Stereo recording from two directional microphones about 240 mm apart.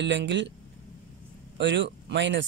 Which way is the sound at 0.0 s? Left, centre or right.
Right.